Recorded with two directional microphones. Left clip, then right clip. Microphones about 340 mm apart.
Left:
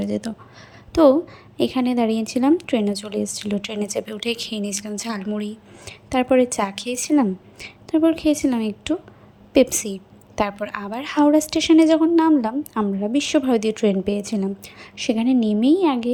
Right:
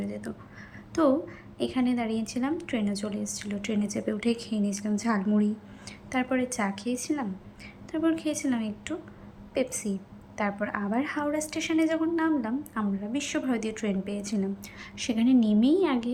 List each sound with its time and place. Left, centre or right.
0.9 s a woman's voice: centre